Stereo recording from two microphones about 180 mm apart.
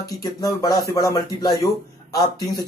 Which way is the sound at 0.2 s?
20° left (ahead or behind).